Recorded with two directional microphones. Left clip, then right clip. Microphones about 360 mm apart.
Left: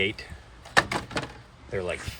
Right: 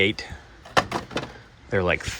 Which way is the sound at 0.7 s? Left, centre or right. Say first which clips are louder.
Right 1 dB; centre.